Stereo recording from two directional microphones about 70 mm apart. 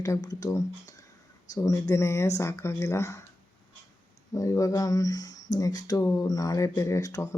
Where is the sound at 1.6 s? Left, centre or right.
Left.